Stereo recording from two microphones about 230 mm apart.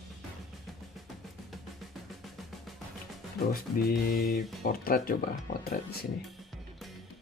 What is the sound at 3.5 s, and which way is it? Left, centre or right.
Speech, left.